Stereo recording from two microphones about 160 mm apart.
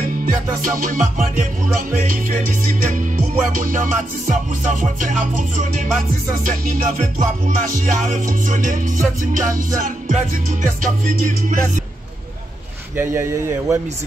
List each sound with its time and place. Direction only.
0.0 s music: 60° right (ahead or behind)
12.9 s speech: 15° right (ahead or behind)